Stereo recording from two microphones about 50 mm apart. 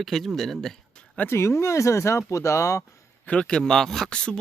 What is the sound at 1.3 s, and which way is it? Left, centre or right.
Speech, left.